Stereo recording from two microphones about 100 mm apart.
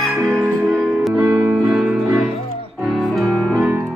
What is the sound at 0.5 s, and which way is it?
Music, 15° right (ahead or behind).